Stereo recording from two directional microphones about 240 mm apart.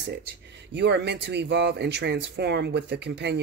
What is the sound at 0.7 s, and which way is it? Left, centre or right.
Speech, right.